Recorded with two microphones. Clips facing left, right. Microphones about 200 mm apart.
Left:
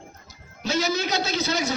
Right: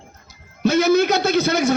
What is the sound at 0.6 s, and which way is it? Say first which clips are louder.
A man's voice: right 10 dB; 55° right (ahead or behind).